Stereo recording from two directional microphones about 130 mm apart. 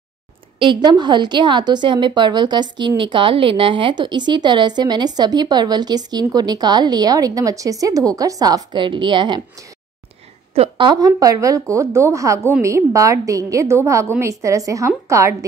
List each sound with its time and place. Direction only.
0.6 s a woman's voice: 35° right (ahead or behind)
10.5 s a woman's voice: 50° right (ahead or behind)
10.9 s a woman's voice: 30° right (ahead or behind)